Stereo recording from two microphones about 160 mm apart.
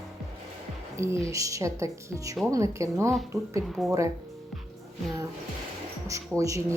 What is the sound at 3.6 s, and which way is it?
Speech, centre (ahead or behind).